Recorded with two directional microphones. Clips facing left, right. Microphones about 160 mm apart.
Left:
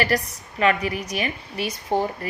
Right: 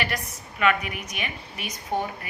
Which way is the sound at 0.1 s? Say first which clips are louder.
Left 8 dB; 40° left (ahead or behind).